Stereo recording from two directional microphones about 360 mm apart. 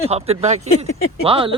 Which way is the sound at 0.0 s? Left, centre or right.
Centre.